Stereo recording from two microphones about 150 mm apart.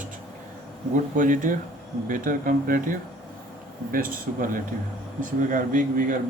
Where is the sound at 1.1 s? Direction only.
65° right (ahead or behind).